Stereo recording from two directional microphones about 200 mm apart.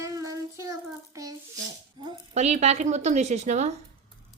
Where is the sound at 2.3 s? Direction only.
35° right (ahead or behind).